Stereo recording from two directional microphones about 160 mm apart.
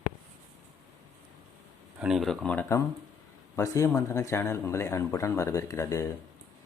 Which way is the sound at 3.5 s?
20° left (ahead or behind).